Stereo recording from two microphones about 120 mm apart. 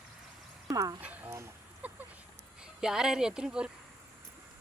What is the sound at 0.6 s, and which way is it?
Speech, 30° right (ahead or behind).